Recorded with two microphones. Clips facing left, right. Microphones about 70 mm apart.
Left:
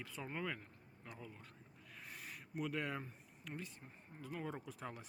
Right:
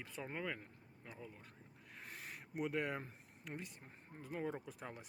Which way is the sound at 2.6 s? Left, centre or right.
Right.